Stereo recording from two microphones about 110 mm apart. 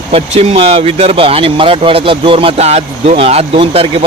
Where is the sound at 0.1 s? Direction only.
65° right (ahead or behind).